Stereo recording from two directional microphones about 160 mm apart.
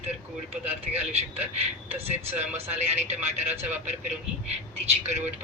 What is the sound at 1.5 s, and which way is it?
Speech, 40° right (ahead or behind).